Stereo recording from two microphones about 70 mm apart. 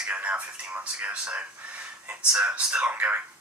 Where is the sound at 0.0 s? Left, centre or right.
Centre.